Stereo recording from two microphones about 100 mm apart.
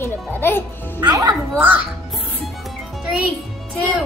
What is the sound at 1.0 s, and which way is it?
Speech, 45° right (ahead or behind).